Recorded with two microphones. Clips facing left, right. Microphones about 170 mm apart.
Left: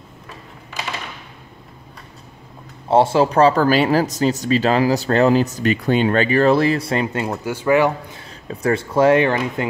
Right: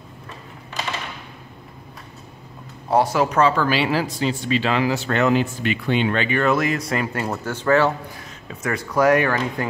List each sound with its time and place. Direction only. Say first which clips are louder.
2.9 s speech: left 4 dB; 25° left (ahead or behind)
7.4 s speech: left 2 dB; 10° left (ahead or behind)
8.5 s speech: left 6 dB; 30° left (ahead or behind)